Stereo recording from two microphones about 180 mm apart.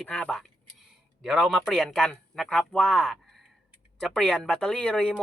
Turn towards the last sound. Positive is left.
turn(degrees=5)  # may be behind; listen again after turning